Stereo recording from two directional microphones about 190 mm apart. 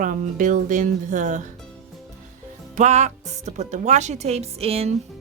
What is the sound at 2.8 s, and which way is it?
A woman's voice, 35° right (ahead or behind).